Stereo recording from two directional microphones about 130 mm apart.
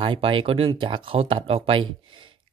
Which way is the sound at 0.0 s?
40° right (ahead or behind).